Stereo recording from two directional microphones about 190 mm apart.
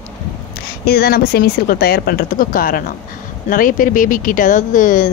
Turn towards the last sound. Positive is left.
turn(degrees=45)  # may be behind; listen again after turning